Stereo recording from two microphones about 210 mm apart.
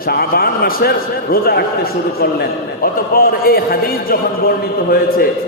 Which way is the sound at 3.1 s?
45° left (ahead or behind).